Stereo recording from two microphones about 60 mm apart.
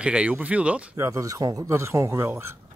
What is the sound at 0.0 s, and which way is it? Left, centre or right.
Speech, right.